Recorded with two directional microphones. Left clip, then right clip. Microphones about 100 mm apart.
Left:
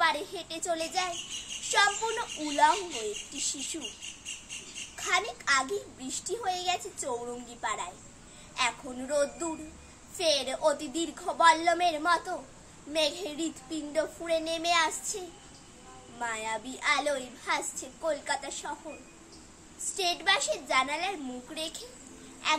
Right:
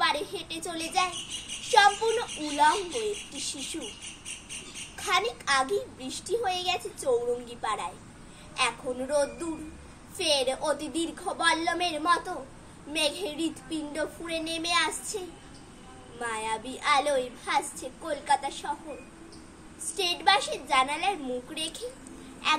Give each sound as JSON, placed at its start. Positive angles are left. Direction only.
{"t": 0.0, "sound": "a sound", "side_deg": 35}
{"t": 1.6, "sound": "a child's voice", "side_deg": 40}
{"t": 4.9, "sound": "a child's voice", "side_deg": 40}
{"t": 16.3, "sound": "a child's voice", "side_deg": 40}
{"t": 20.0, "sound": "a child's voice", "side_deg": 35}